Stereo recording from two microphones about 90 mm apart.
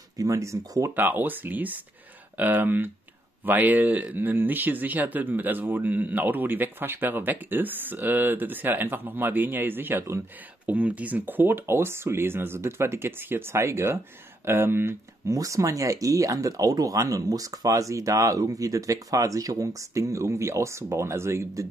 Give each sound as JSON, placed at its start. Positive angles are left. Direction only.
{"t": 0.2, "sound": "speech", "side_deg": -35}
{"t": 0.9, "sound": "speech", "side_deg": -20}
{"t": 10.7, "sound": "speech", "side_deg": -15}
{"t": 15.3, "sound": "speech", "side_deg": -35}